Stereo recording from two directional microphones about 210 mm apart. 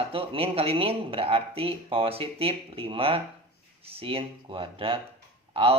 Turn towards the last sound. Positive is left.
turn(degrees=-25)  # may be behind; listen again after turning